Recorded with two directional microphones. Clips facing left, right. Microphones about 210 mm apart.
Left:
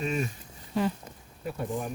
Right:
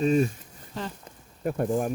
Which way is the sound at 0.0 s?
35° right (ahead or behind).